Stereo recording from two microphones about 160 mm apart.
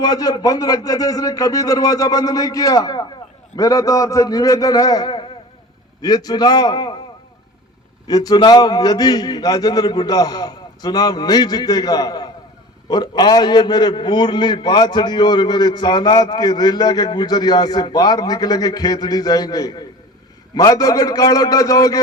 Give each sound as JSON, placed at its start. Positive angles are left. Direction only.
{"t": 0.0, "sound": "a man's voice", "side_deg": 25}
{"t": 8.0, "sound": "a man's voice", "side_deg": 25}